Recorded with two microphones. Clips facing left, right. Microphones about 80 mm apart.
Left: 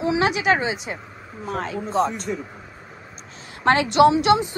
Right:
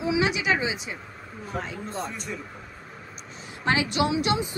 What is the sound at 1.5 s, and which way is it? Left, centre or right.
Speech, left.